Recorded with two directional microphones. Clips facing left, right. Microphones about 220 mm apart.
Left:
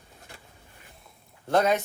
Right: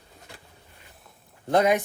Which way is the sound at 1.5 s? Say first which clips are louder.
Right 2 dB; 15° right (ahead or behind).